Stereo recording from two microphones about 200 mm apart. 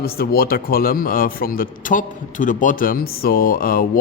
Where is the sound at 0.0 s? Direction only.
50° left (ahead or behind).